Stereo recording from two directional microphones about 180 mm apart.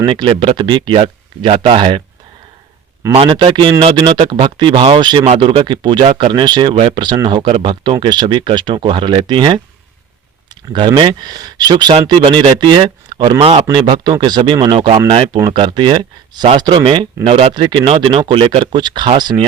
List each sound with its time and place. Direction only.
0.0 s speech: 25° right (ahead or behind)
3.1 s speech: 30° right (ahead or behind)